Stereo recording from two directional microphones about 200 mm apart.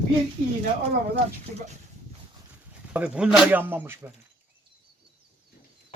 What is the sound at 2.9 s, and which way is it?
Speech, 5° right (ahead or behind).